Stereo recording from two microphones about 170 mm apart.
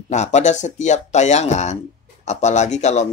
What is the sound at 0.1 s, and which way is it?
Speech, 40° left (ahead or behind).